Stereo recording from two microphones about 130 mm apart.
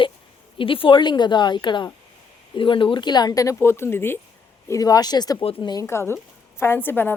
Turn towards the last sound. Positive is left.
turn(degrees=15)  # may be behind; listen again after turning